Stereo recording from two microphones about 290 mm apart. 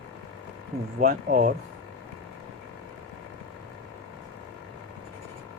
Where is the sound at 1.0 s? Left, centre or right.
Right.